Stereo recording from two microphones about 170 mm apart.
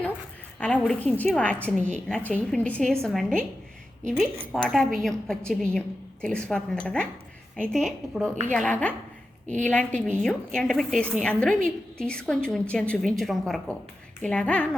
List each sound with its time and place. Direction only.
0.6 s a woman's voice: 5° left (ahead or behind)